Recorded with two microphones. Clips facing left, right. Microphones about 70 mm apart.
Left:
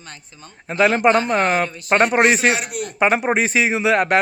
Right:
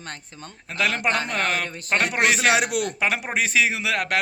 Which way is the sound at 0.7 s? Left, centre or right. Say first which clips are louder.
Left 8 dB; left.